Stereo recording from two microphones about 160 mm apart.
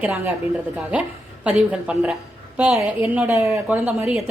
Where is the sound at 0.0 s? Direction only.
10° right (ahead or behind).